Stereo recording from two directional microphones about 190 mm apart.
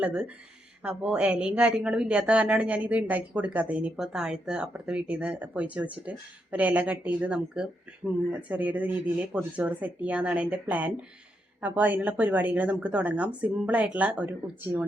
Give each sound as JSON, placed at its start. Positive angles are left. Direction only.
{"t": 0.0, "sound": "speech", "side_deg": -5}